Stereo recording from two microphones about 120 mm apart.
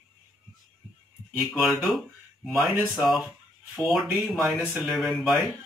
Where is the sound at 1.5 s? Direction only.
Centre (ahead or behind).